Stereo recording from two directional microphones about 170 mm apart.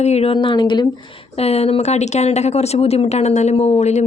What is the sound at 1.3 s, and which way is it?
Speech, 35° left (ahead or behind).